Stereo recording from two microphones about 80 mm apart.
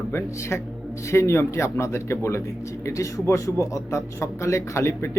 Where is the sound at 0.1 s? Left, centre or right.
Left.